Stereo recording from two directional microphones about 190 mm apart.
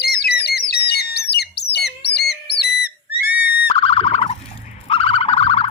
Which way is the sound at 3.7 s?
30° left (ahead or behind).